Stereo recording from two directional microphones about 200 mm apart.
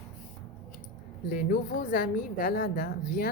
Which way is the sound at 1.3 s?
45° left (ahead or behind).